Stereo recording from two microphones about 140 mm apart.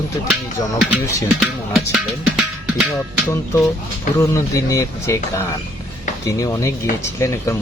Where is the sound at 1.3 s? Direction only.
Centre (ahead or behind).